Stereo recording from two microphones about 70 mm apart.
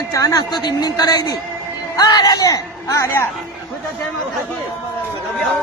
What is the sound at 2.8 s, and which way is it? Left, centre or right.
Speech, left.